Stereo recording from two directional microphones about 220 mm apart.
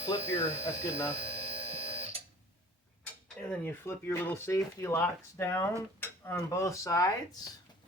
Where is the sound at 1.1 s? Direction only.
25° right (ahead or behind).